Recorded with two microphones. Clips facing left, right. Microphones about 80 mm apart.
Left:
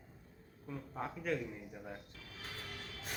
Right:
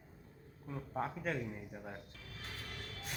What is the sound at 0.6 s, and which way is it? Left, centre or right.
Speech, right.